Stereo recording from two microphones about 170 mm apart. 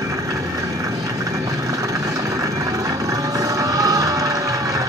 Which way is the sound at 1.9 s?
20° right (ahead or behind).